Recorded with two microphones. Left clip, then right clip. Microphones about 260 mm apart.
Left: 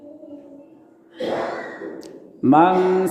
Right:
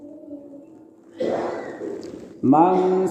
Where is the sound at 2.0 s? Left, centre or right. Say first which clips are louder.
Left 5 dB; left.